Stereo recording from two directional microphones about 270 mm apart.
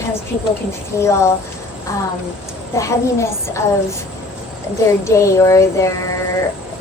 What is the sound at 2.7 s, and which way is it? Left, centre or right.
Speech, centre.